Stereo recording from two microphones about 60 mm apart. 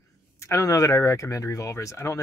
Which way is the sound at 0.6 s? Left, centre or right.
Left.